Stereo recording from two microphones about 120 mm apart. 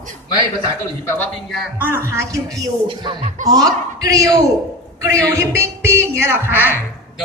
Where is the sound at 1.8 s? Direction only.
20° right (ahead or behind).